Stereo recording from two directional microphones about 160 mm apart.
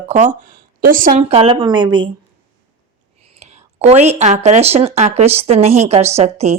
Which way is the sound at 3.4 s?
45° right (ahead or behind).